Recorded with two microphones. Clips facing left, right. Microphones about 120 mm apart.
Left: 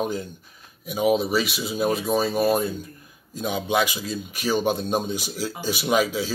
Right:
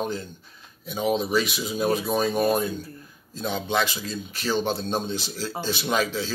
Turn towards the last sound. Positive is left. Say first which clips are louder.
# left 3 dB
turn(degrees=10)  # may be behind; listen again after turning